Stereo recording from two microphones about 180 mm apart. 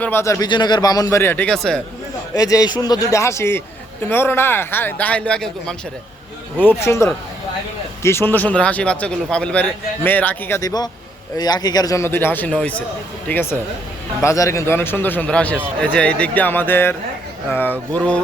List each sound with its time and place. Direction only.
0.0 s a man's voice: 15° left (ahead or behind)
2.3 s a man's voice: 20° left (ahead or behind)